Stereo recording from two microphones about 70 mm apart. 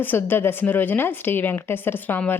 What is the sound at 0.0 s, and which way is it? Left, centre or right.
A woman's voice, left.